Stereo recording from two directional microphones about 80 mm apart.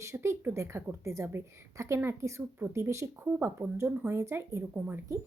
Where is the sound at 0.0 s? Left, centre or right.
Right.